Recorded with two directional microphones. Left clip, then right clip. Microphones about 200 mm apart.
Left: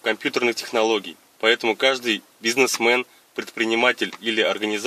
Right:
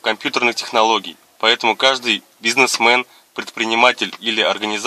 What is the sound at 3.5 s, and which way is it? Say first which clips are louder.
Speech: right 5 dB; 5° right (ahead or behind).